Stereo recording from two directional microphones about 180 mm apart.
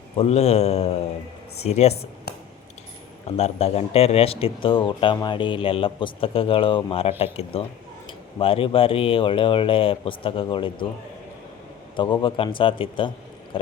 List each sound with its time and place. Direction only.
0.2 s speech: 35° left (ahead or behind)
3.2 s a man's voice: 35° left (ahead or behind)
12.2 s a man's voice: 30° left (ahead or behind)